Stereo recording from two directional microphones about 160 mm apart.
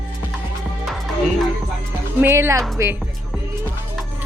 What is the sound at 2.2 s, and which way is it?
Speech, 15° right (ahead or behind).